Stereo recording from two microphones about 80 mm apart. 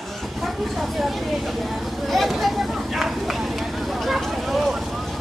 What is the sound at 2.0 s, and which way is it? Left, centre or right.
Vehicle, centre.